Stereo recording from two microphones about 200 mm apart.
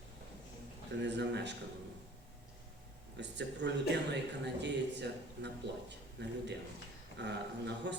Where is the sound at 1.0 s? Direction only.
60° right (ahead or behind).